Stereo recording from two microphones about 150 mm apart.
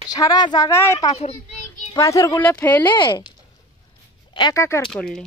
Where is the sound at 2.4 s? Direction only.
10° left (ahead or behind).